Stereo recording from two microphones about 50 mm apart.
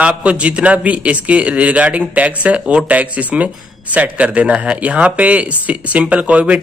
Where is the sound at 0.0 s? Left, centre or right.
Right.